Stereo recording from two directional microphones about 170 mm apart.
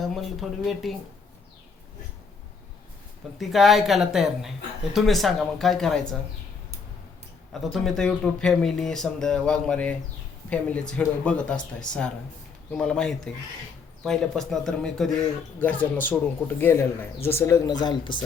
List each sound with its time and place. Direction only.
0.0 s speech: centre (ahead or behind)
3.3 s speech: centre (ahead or behind)
7.5 s speech: centre (ahead or behind); by 18.2 s 30° left (ahead or behind)